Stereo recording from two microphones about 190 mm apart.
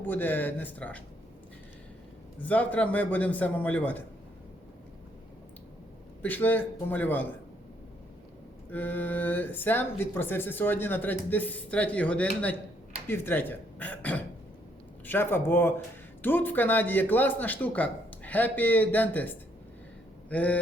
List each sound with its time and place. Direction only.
0.0 s speech: 10° left (ahead or behind)
2.4 s speech: 10° left (ahead or behind)
6.2 s speech: 10° left (ahead or behind)
8.7 s speech: 10° left (ahead or behind)